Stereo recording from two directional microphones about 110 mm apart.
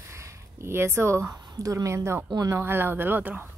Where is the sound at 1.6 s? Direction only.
30° right (ahead or behind).